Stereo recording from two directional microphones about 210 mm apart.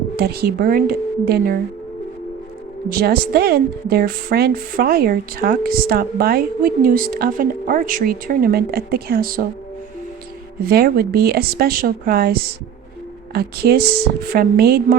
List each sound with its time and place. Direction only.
0.2 s a woman's voice: 45° right (ahead or behind)
2.9 s a woman's voice: 45° right (ahead or behind)
10.6 s a woman's voice: 45° right (ahead or behind)